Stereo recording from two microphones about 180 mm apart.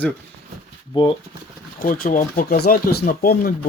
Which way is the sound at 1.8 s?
55° left (ahead or behind).